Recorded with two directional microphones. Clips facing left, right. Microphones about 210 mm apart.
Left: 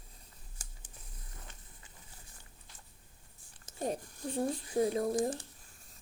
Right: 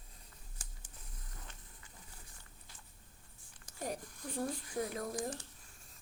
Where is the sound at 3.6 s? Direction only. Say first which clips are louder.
Left 5 dB; 25° left (ahead or behind).